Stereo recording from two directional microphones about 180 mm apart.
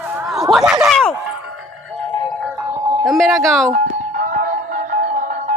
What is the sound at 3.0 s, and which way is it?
Speech, centre (ahead or behind).